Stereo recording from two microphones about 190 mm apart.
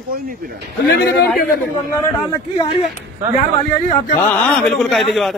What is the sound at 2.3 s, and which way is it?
Speech, 20° left (ahead or behind).